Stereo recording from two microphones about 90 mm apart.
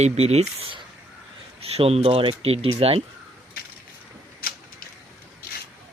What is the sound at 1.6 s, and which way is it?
Speech, 90° right.